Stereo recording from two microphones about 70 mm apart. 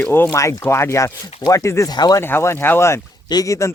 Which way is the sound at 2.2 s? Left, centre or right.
Left.